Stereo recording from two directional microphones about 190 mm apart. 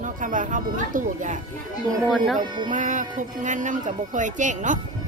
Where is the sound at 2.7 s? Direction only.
40° right (ahead or behind).